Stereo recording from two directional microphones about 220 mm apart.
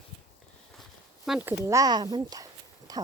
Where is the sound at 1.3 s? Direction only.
10° right (ahead or behind).